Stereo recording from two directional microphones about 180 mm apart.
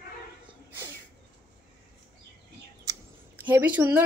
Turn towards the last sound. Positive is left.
turn(degrees=-10)  # may be behind; listen again after turning